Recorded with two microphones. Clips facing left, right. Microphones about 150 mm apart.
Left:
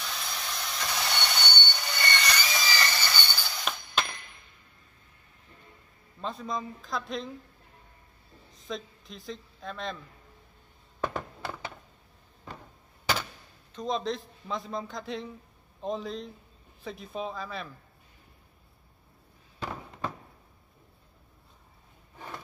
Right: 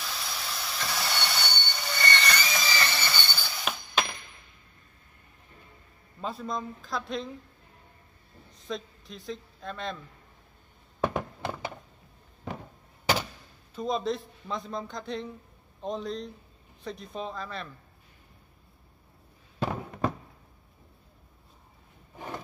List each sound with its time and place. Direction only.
0.0 s rail transport: 5° right (ahead or behind)
6.2 s a man's voice: centre (ahead or behind)
8.5 s speech: centre (ahead or behind)
11.1 s a sound: 15° right (ahead or behind)
13.7 s a man's voice: 5° right (ahead or behind)